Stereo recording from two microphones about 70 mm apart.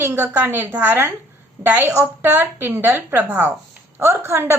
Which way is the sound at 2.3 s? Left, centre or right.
Right.